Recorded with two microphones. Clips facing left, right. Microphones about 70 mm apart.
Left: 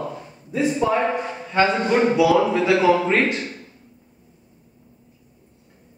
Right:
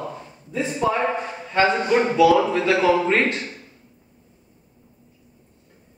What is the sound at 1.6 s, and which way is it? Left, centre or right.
Speech, centre.